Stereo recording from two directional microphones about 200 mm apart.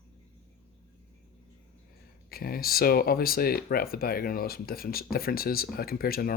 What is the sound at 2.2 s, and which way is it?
Speech, 50° left (ahead or behind).